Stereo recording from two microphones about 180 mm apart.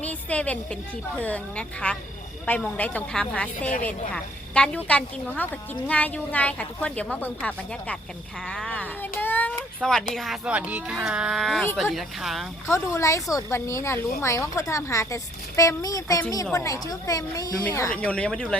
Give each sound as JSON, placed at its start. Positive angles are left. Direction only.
{"t": 0.0, "sound": "a woman's voice", "side_deg": 10}
{"t": 12.6, "sound": "a woman's voice", "side_deg": 15}